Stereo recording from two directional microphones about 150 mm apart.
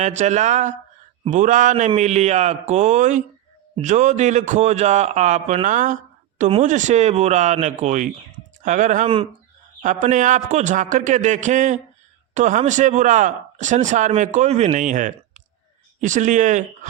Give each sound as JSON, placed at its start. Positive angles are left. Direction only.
{"t": 0.0, "sound": "a man's voice", "side_deg": -50}